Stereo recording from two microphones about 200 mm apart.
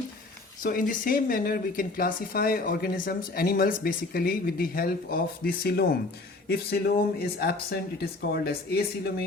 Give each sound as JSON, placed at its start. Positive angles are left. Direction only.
{"t": 0.6, "sound": "speech", "side_deg": 45}